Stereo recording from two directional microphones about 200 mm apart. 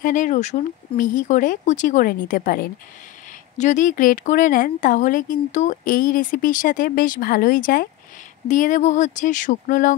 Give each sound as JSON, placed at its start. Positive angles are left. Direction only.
{"t": 0.0, "sound": "speech", "side_deg": 40}